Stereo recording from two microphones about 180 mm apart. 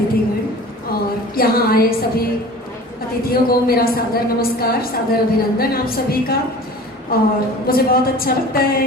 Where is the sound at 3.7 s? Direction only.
55° left (ahead or behind).